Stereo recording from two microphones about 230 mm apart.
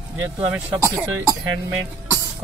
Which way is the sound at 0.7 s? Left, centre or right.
Centre.